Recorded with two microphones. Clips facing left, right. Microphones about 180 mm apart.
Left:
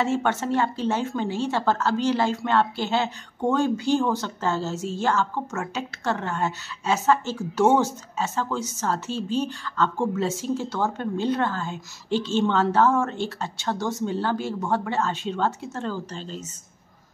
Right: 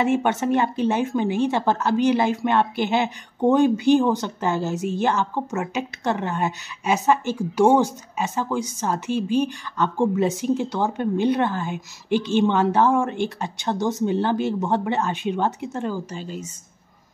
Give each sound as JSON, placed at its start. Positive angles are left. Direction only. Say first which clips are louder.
{"t": 0.0, "sound": "speech", "louder": "right 3 dB", "side_deg": -15}